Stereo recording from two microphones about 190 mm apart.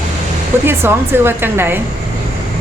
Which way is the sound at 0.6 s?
10° right (ahead or behind).